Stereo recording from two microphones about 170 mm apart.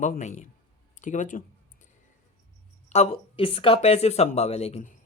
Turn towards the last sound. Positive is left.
turn(degrees=40)  # may be behind; listen again after turning